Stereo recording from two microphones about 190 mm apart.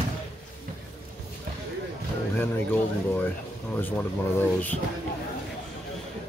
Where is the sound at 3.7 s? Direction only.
10° left (ahead or behind).